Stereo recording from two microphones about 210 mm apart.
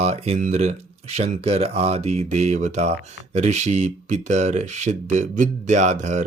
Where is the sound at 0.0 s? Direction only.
30° right (ahead or behind).